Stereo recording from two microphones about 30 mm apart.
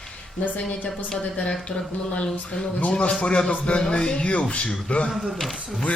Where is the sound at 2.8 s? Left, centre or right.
Left.